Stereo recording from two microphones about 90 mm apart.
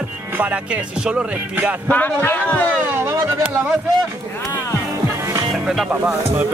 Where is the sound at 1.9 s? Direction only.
20° left (ahead or behind).